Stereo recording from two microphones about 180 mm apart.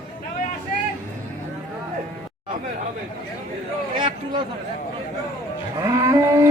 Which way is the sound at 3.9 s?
25° right (ahead or behind).